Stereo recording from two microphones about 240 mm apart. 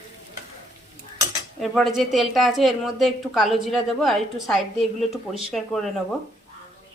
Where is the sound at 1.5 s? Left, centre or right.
Centre.